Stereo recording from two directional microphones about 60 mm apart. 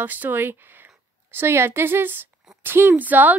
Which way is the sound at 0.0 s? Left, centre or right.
Right.